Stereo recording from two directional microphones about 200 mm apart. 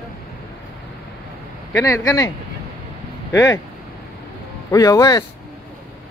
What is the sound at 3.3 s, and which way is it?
Speech, 15° left (ahead or behind).